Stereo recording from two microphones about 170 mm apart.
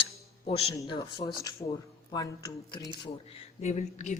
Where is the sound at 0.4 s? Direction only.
35° left (ahead or behind).